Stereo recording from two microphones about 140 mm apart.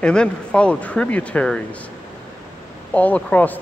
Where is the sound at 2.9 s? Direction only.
10° left (ahead or behind).